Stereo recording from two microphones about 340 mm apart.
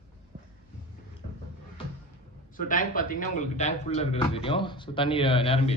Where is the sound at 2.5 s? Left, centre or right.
Left.